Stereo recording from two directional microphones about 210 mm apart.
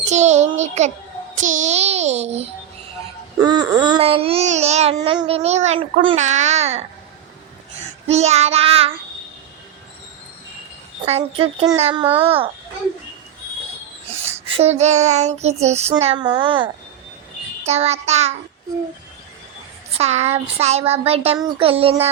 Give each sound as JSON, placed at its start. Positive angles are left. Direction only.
{"t": 0.0, "sound": "child singing", "side_deg": -35}
{"t": 3.3, "sound": "speech", "side_deg": -20}
{"t": 4.9, "sound": "child singing", "side_deg": -20}
{"t": 8.0, "sound": "speech", "side_deg": -30}
{"t": 11.0, "sound": "speech", "side_deg": -25}
{"t": 14.3, "sound": "child singing", "side_deg": -30}
{"t": 17.7, "sound": "child singing", "side_deg": -30}
{"t": 20.0, "sound": "speech", "side_deg": -30}